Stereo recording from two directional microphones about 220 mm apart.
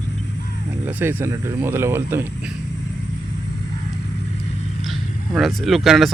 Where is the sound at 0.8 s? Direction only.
10° right (ahead or behind).